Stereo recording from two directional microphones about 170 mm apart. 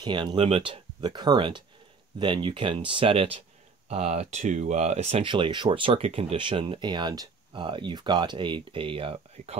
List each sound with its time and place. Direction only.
0.0 s speech: 25° right (ahead or behind)